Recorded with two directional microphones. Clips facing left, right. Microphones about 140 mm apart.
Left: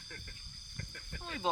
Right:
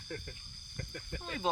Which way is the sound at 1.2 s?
15° right (ahead or behind).